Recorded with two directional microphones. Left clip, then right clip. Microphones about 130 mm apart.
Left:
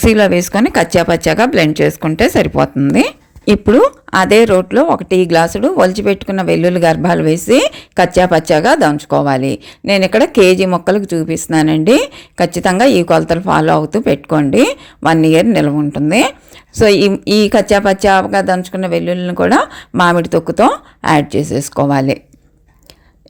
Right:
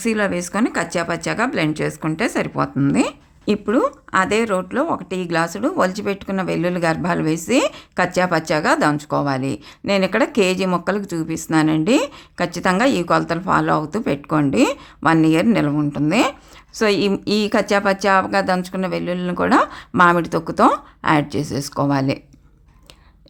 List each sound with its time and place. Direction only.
0.0 s speech: 35° left (ahead or behind)